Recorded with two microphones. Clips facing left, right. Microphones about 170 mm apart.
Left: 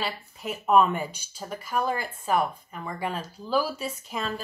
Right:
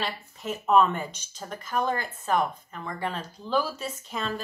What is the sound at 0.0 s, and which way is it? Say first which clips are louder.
Speech: even; 5° left (ahead or behind).